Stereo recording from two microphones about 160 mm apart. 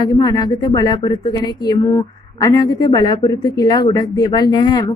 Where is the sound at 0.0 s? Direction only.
25° left (ahead or behind).